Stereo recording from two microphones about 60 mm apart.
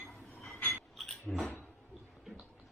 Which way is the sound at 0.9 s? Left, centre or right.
Centre.